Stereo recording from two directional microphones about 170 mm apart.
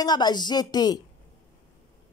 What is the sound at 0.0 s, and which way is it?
Speech, 25° left (ahead or behind).